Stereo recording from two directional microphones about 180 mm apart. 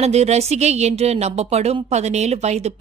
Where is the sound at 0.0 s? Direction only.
35° right (ahead or behind).